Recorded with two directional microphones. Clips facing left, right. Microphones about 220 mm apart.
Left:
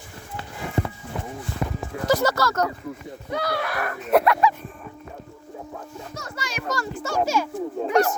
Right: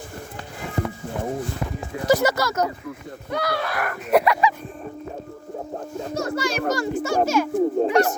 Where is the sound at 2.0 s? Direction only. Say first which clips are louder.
Right 2 dB; 15° right (ahead or behind).